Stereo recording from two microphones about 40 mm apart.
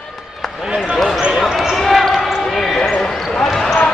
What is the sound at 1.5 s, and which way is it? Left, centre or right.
Basketball bounce, centre.